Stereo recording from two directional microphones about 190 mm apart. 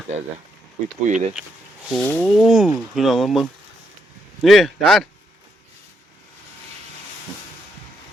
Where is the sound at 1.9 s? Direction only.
10° left (ahead or behind).